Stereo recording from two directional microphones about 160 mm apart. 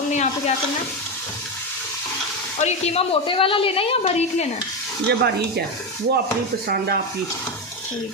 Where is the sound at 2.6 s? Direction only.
45° left (ahead or behind).